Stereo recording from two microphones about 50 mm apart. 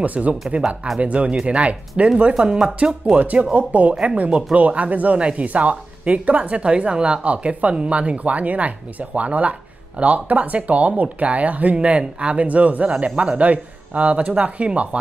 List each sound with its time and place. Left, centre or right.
0.0 s speech: right